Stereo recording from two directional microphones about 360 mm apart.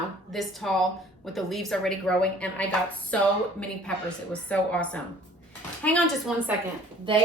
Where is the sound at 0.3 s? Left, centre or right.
Centre.